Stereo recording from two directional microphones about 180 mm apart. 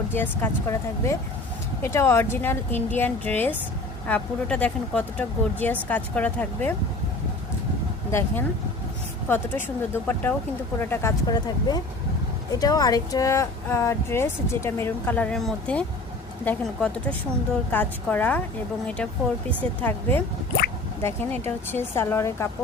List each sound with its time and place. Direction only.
0.1 s a woman's voice: 10° left (ahead or behind)
9.3 s a woman's voice: 10° left (ahead or behind)
11.3 s a woman's voice: 20° left (ahead or behind)
19.8 s a woman's voice: 10° left (ahead or behind)